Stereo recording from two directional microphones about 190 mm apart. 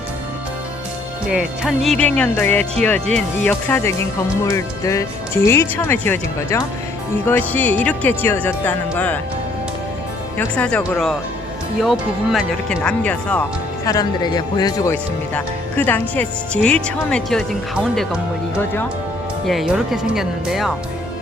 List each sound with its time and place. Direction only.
1.3 s speech: 5° right (ahead or behind)
10.3 s speech: 5° left (ahead or behind)
13.8 s speech: 20° left (ahead or behind); by 20.7 s centre (ahead or behind)